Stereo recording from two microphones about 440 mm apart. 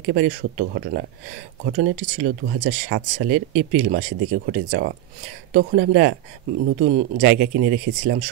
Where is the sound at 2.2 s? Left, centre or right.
Right.